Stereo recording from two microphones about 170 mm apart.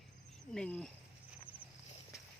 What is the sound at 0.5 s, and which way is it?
Speech, 5° left (ahead or behind).